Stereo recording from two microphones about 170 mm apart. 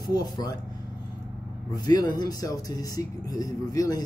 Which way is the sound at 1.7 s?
20° left (ahead or behind).